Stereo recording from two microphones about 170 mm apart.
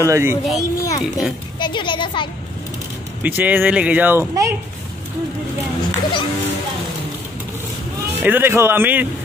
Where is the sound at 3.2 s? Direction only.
10° right (ahead or behind).